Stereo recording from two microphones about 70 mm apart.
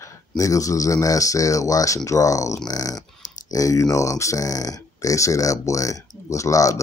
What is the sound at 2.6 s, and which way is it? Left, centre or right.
Speech, left.